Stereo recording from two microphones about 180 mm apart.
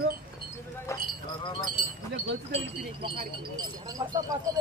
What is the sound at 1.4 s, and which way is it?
Speech, 30° left (ahead or behind).